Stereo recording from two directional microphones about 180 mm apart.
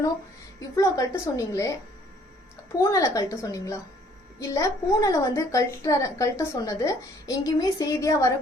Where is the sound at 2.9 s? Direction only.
20° left (ahead or behind).